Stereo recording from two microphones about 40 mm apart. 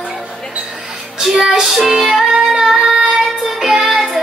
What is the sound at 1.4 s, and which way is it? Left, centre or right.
Music, centre.